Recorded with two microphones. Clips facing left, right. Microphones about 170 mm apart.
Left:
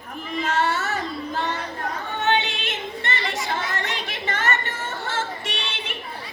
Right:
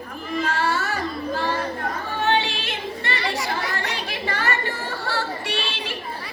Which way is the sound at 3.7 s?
20° left (ahead or behind).